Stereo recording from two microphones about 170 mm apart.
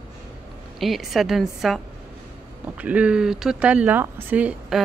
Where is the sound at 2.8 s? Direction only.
10° right (ahead or behind).